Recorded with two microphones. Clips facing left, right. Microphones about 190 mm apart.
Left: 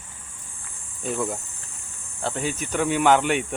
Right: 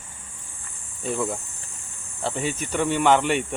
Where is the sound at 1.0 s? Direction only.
Centre (ahead or behind).